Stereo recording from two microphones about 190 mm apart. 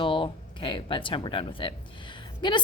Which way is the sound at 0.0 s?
25° left (ahead or behind).